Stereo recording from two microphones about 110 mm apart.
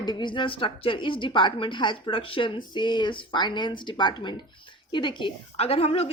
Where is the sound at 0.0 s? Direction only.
45° left (ahead or behind).